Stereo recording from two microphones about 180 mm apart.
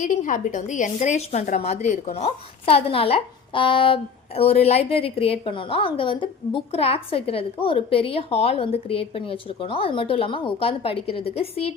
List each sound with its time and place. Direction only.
0.0 s a woman's voice: 45° left (ahead or behind)